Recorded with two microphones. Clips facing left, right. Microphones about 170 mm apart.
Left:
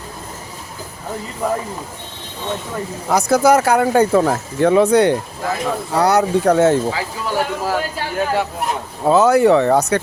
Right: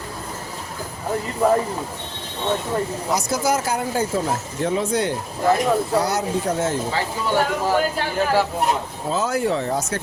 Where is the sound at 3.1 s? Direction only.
60° left (ahead or behind).